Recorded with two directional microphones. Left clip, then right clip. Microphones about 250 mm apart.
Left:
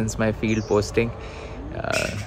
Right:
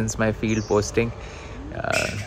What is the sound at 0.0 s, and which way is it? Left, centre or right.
Speech, centre.